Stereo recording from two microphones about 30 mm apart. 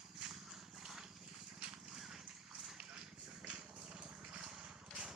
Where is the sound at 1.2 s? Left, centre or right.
Right.